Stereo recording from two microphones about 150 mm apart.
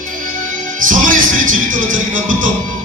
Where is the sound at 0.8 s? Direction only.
60° right (ahead or behind).